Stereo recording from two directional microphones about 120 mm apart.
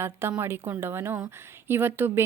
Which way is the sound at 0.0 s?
20° right (ahead or behind).